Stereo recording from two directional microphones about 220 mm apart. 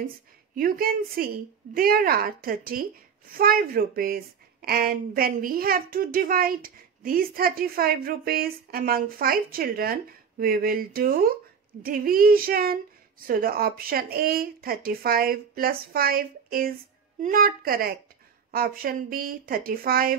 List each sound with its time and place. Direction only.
0.6 s a woman's voice: 40° right (ahead or behind)